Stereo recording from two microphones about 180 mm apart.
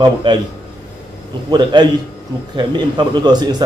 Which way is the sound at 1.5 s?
25° right (ahead or behind).